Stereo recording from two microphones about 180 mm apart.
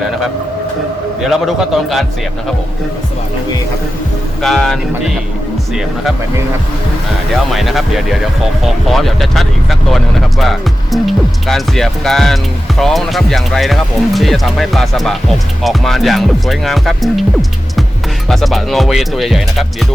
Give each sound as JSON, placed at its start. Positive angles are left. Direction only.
{"t": 1.2, "sound": "speech", "side_deg": 0}
{"t": 4.4, "sound": "speech", "side_deg": 0}
{"t": 7.5, "sound": "speech", "side_deg": 0}
{"t": 18.3, "sound": "speech", "side_deg": 0}